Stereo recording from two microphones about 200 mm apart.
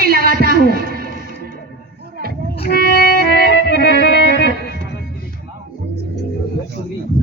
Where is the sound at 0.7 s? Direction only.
50° right (ahead or behind).